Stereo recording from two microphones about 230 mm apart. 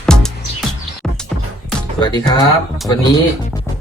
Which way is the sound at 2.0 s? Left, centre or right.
Centre.